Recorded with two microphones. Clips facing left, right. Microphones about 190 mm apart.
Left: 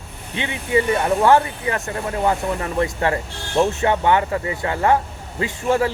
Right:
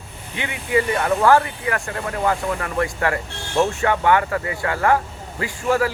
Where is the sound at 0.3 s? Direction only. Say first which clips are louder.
Left 1 dB; 25° left (ahead or behind).